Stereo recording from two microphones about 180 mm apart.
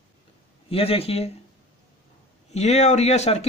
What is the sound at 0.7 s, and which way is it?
Speech, 30° left (ahead or behind).